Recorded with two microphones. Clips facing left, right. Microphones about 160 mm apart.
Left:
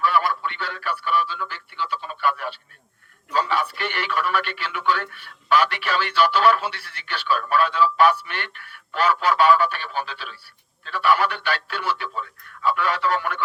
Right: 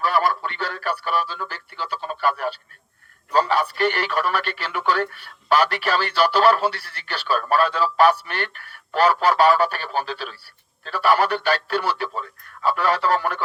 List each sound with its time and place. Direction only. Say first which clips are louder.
0.0 s speech: right 1 dB; 40° right (ahead or behind)